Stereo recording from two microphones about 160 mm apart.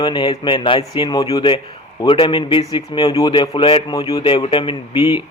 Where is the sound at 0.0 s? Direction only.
30° left (ahead or behind).